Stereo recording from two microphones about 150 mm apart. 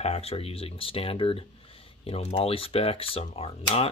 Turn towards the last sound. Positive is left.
turn(degrees=40)  # may be behind; listen again after turning